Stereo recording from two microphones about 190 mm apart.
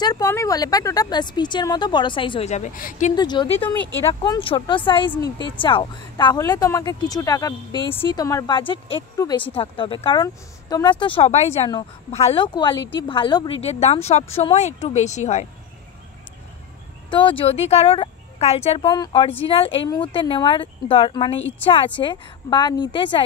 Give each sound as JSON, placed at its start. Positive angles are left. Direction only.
{"t": 0.0, "sound": "a woman's voice", "side_deg": 20}
{"t": 3.2, "sound": "a woman's voice", "side_deg": 25}
{"t": 3.6, "sound": "speech", "side_deg": 10}
{"t": 4.1, "sound": "a woman's voice", "side_deg": 25}
{"t": 17.1, "sound": "a woman's voice", "side_deg": 25}